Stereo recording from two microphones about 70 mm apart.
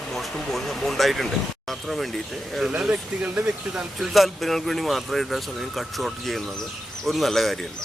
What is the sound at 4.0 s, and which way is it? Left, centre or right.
Speech, centre.